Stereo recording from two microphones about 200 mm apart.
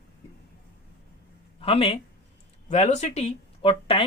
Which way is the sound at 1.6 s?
30° left (ahead or behind).